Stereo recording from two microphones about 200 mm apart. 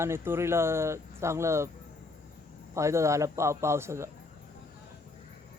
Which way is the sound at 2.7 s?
15° right (ahead or behind).